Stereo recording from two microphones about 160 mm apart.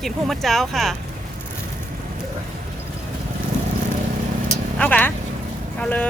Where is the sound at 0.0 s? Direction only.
Centre (ahead or behind).